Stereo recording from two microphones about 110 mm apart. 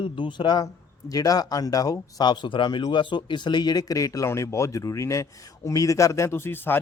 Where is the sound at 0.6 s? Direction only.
35° left (ahead or behind).